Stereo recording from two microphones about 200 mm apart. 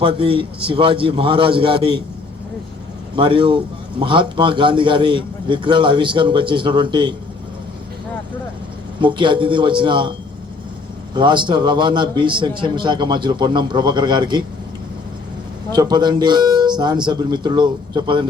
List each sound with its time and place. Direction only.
0.0 s a man's voice: 25° right (ahead or behind)
3.2 s a man's voice: 25° right (ahead or behind)
9.0 s a man's voice: 25° right (ahead or behind)
15.7 s a man's voice: 20° right (ahead or behind)